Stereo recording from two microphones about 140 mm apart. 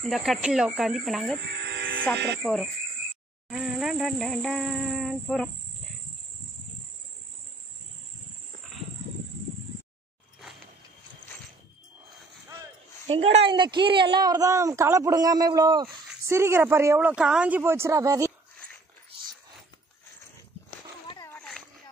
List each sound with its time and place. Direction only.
0.0 s speech: centre (ahead or behind)
13.0 s speech: 45° right (ahead or behind); by 15.9 s 30° right (ahead or behind)
16.3 s speech: 20° right (ahead or behind)
17.1 s speech: 5° right (ahead or behind); by 18.3 s 25° right (ahead or behind)
21.3 s a sound: 5° left (ahead or behind)